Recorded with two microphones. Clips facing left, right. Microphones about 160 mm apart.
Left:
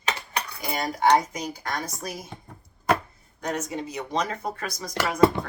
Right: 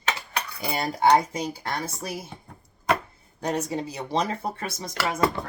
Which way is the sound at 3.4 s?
35° right (ahead or behind).